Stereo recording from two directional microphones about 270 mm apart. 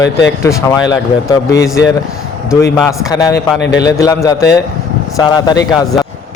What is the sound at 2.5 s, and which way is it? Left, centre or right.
Speech, centre.